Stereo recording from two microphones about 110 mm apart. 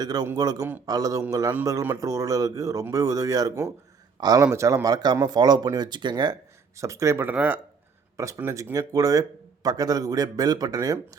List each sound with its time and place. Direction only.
0.0 s speech: 35° right (ahead or behind)
6.7 s speech: 30° right (ahead or behind)
8.1 s speech: 30° right (ahead or behind)